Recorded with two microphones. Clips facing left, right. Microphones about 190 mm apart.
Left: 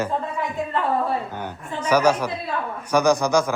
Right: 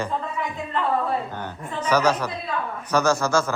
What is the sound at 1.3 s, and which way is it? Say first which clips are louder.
A woman's voice: left 1 dB; 10° left (ahead or behind).